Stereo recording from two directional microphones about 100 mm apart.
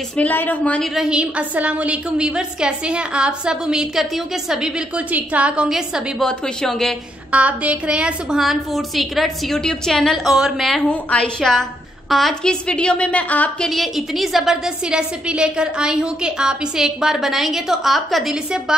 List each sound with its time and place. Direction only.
0.1 s a woman's voice: 15° left (ahead or behind)
0.9 s a woman's voice: 10° right (ahead or behind)
6.2 s a woman's voice: 5° left (ahead or behind)
7.2 s a woman's voice: 15° right (ahead or behind)
10.9 s a woman's voice: 10° left (ahead or behind)
13.7 s a woman's voice: centre (ahead or behind)